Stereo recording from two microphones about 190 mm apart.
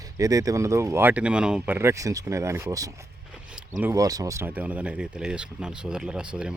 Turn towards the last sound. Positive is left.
turn(degrees=-5)  # may be behind; listen again after turning